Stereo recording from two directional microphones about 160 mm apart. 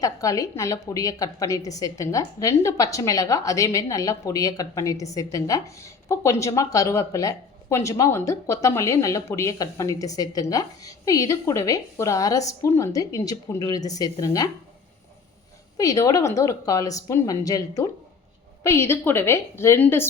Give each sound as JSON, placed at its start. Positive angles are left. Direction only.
{"t": 0.0, "sound": "a woman's voice", "side_deg": 20}
{"t": 15.8, "sound": "a woman's voice", "side_deg": 20}